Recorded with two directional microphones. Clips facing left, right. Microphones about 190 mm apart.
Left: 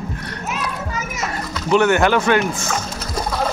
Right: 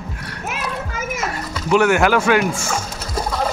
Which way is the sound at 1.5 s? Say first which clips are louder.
Even; 5° right (ahead or behind).